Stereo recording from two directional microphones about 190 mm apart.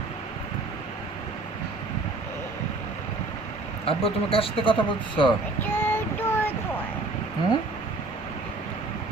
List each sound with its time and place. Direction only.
3.8 s speech: 30° left (ahead or behind)
5.6 s child singing: 10° left (ahead or behind)